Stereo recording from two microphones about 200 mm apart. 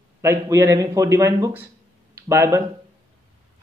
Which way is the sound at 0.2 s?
15° right (ahead or behind).